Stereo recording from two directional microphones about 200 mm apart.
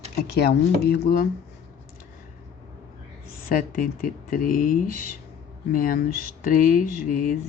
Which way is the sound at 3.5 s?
45° left (ahead or behind).